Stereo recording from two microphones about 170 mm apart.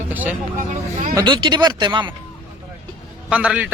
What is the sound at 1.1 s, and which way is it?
Speech, 25° right (ahead or behind).